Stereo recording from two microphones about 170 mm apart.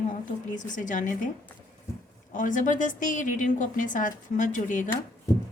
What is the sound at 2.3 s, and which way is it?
Speech, 50° left (ahead or behind).